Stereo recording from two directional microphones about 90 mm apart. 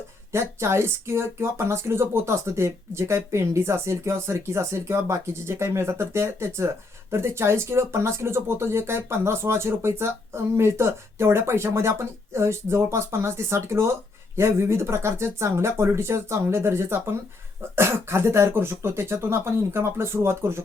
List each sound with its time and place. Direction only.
0.3 s speech: 30° right (ahead or behind)